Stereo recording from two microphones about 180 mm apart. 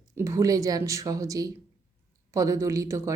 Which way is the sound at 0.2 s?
15° right (ahead or behind).